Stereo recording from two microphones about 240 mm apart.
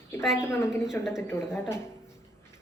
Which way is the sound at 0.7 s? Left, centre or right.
Centre.